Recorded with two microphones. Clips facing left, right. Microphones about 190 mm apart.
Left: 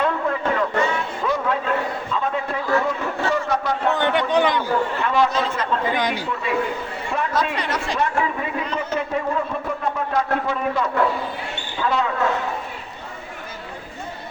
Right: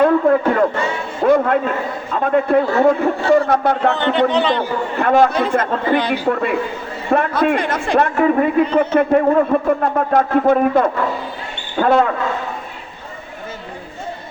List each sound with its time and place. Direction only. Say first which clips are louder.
0.0 s a sound: right 9 dB; 50° right (ahead or behind)
2.1 s a man's voice: right 12 dB; 55° right (ahead or behind)
3.9 s a man's voice: right 3 dB; 15° left (ahead or behind)
4.9 s a man's voice: right 11 dB; 50° right (ahead or behind)